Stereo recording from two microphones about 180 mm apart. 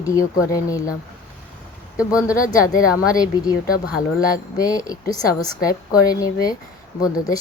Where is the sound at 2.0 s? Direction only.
20° left (ahead or behind).